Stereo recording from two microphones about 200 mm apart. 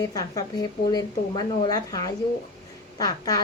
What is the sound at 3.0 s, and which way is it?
Speech, 20° left (ahead or behind).